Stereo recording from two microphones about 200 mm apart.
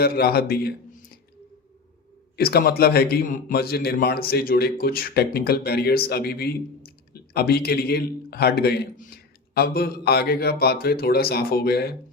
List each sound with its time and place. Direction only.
0.0 s a man's voice: 50° left (ahead or behind)
2.3 s a man's voice: 50° left (ahead or behind)